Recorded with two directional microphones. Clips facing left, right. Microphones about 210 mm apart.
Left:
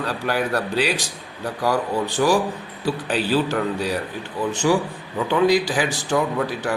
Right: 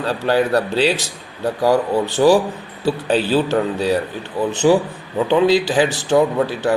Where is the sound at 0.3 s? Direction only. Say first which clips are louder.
Right 7 dB; 25° right (ahead or behind).